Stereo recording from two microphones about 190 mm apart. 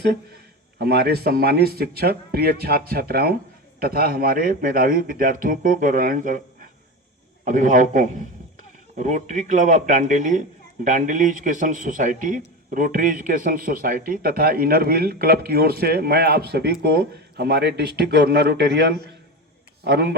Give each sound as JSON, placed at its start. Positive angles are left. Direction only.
{"t": 0.8, "sound": "a man's voice", "side_deg": -55}